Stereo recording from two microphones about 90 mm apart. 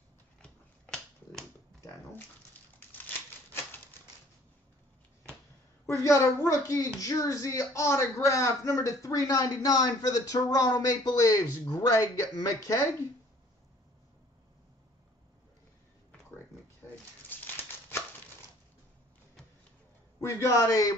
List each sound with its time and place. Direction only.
0.4 s a sound: 10° left (ahead or behind)
5.9 s a man's voice: 30° left (ahead or behind)
17.3 s crumpling: 20° left (ahead or behind)
20.2 s a man's voice: 35° left (ahead or behind)